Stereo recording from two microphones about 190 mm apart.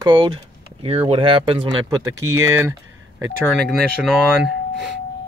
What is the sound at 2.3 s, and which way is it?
Speech, 15° right (ahead or behind).